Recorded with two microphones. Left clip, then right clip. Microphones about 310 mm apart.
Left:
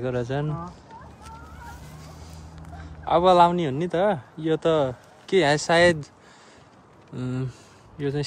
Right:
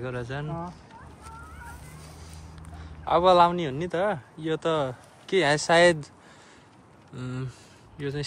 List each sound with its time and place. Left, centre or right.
0.0 s speech: centre
3.1 s speech: centre
7.2 s speech: centre